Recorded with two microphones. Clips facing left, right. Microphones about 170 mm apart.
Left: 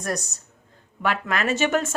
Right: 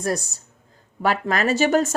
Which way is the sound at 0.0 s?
30° right (ahead or behind).